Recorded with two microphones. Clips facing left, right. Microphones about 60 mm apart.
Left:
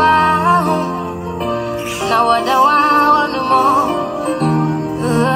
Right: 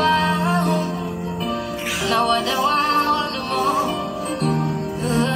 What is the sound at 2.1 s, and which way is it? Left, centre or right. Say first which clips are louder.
Music: left 7 dB; left.